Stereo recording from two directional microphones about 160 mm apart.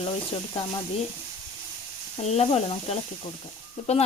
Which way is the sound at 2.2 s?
40° left (ahead or behind).